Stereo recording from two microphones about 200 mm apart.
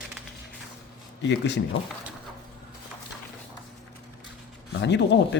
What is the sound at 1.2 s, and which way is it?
Speech, 60° left (ahead or behind).